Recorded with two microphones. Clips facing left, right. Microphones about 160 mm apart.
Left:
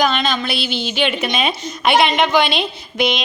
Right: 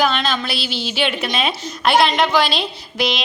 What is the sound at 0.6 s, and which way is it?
Speech, 55° left (ahead or behind).